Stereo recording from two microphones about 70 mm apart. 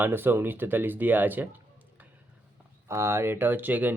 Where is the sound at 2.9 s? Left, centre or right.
Right.